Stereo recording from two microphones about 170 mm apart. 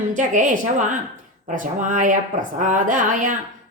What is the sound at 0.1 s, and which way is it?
A woman's voice, 50° right (ahead or behind).